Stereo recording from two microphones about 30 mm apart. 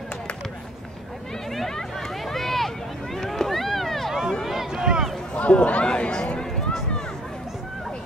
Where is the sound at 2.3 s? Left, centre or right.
Centre.